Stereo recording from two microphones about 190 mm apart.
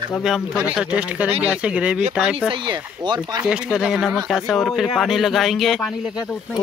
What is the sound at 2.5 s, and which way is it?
Speech, 25° right (ahead or behind).